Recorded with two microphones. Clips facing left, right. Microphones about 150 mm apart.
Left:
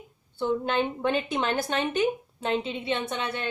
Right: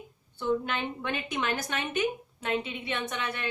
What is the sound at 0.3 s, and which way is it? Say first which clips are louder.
A woman's voice: left 4 dB; 30° left (ahead or behind).